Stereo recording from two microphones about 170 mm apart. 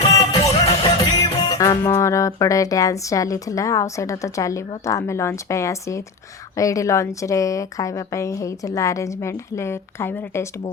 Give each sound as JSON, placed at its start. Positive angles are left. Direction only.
{"t": 0.0, "sound": "music", "side_deg": 25}
{"t": 6.6, "sound": "a woman's voice", "side_deg": 20}